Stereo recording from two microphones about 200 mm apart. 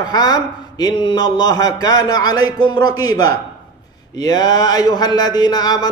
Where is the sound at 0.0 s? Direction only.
20° left (ahead or behind).